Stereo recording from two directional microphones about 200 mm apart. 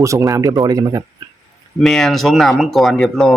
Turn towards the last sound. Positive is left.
turn(degrees=0)  # may be behind; listen again after turning